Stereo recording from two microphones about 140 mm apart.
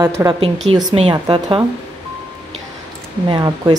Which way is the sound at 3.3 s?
30° right (ahead or behind).